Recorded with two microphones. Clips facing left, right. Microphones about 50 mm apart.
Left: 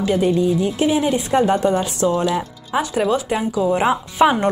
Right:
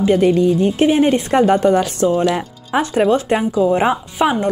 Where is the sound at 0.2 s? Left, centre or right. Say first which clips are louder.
Right 4 dB; right.